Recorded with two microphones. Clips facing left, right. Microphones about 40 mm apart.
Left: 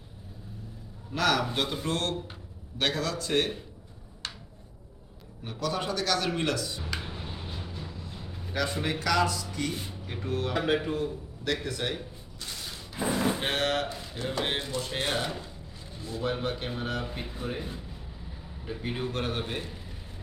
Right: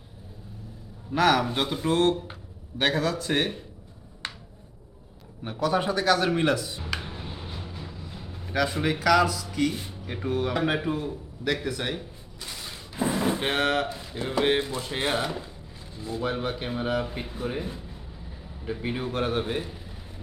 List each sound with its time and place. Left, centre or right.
1.1 s speech: centre
5.5 s speech: centre
6.8 s a sound: centre
10.2 s a man's voice: centre
12.9 s a sound: centre
13.8 s a man's voice: centre